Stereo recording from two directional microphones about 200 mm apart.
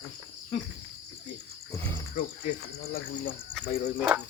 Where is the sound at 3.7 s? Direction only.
45° left (ahead or behind).